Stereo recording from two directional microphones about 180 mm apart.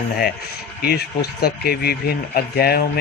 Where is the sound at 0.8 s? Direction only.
60° left (ahead or behind).